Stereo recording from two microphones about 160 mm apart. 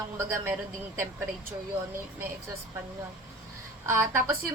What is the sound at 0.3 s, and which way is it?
Speech, 15° right (ahead or behind).